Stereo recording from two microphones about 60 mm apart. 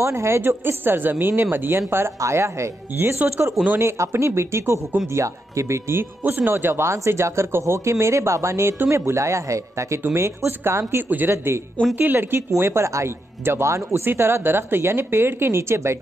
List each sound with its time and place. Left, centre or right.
0.0 s speech: right
0.5 s a woman's voice: right
2.1 s a man's voice: right
3.0 s a woman's voice: right
6.2 s a woman's voice: right
6.6 s a man's voice: right
12.5 s a man's voice: right